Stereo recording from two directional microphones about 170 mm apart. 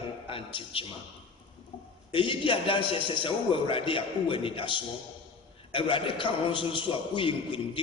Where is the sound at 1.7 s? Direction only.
30° left (ahead or behind).